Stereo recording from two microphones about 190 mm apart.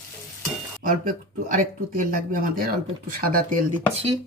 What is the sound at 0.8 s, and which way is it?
Speech, 45° right (ahead or behind).